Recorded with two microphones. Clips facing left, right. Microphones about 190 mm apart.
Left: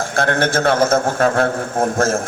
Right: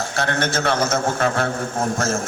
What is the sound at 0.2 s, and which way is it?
A man's voice, 50° left (ahead or behind).